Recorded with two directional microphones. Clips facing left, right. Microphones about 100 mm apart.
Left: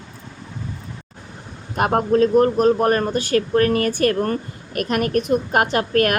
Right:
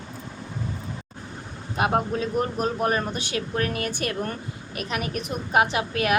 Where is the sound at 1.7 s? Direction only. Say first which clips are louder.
Left 7 dB; 60° left (ahead or behind).